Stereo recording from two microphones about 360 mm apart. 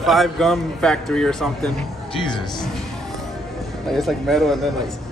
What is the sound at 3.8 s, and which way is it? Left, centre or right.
Speech, centre.